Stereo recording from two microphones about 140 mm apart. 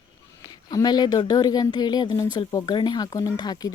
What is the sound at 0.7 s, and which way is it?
Speech, 25° left (ahead or behind).